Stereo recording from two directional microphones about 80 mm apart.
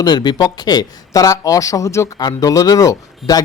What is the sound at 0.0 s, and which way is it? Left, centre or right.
Speech, left.